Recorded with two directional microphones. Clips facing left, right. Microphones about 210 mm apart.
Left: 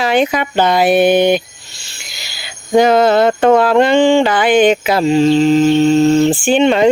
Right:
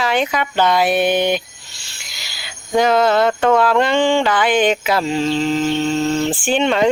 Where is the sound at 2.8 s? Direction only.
15° left (ahead or behind).